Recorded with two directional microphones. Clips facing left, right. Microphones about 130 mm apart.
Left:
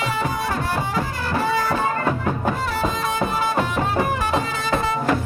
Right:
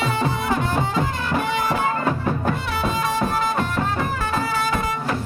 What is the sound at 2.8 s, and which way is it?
Music, centre (ahead or behind).